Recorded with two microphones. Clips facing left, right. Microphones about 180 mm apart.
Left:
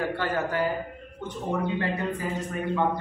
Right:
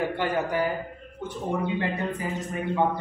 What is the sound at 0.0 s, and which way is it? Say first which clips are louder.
A man's voice: right 1 dB; 15° right (ahead or behind).